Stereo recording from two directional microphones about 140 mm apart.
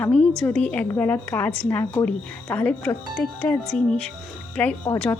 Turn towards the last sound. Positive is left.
turn(degrees=10)  # may be behind; listen again after turning